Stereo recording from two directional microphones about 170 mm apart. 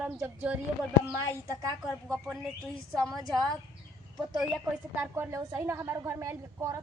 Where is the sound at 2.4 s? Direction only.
Centre (ahead or behind).